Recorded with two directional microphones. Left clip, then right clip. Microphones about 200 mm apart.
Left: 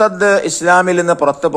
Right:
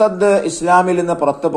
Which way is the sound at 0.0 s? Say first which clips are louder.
Left 1 dB; 35° left (ahead or behind).